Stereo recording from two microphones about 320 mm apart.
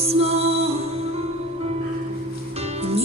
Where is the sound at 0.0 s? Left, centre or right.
Centre.